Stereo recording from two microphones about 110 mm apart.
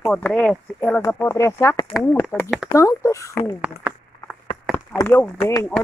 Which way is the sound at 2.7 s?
30° left (ahead or behind).